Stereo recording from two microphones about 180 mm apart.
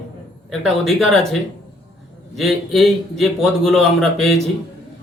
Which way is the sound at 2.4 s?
Centre (ahead or behind).